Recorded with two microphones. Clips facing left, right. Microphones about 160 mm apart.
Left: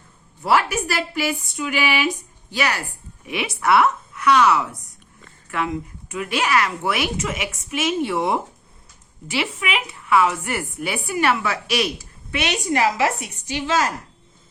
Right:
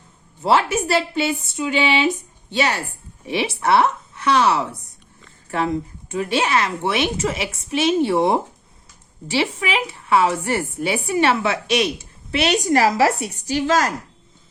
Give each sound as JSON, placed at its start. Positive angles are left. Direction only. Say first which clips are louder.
{"t": 0.4, "sound": "a woman's voice", "louder": "right 2 dB", "side_deg": -25}